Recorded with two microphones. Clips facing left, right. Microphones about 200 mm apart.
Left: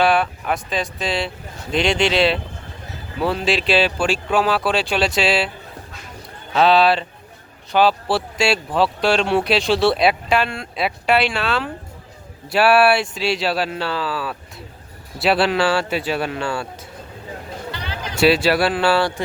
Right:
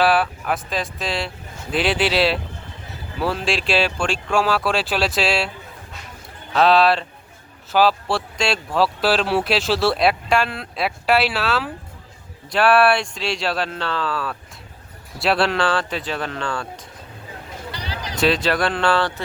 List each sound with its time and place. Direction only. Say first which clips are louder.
0.0 s speech: left 1 dB; centre (ahead or behind)
6.5 s speech: left 1 dB; centre (ahead or behind)
17.7 s a sound: even; 35° right (ahead or behind)
18.2 s speech: left 4 dB; 10° left (ahead or behind)